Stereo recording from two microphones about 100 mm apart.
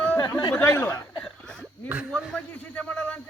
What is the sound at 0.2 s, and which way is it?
Speech, 40° left (ahead or behind).